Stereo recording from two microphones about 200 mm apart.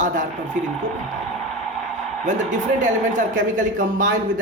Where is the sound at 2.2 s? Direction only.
40° right (ahead or behind).